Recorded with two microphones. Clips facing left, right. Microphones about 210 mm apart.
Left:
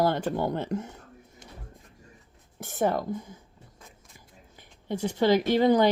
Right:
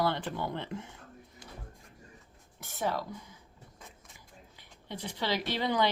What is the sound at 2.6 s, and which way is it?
Speech, 50° left (ahead or behind).